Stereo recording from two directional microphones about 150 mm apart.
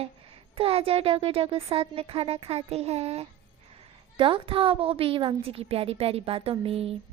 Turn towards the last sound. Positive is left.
turn(degrees=-40)  # may be behind; listen again after turning